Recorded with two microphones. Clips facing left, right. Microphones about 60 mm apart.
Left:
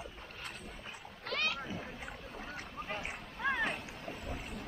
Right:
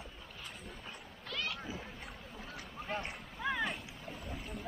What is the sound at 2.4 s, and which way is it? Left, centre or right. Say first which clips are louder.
Boat: left 3 dB; left.